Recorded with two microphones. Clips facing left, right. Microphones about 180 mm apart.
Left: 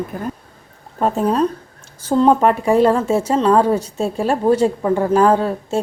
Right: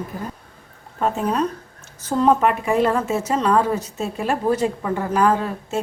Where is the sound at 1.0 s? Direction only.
40° left (ahead or behind).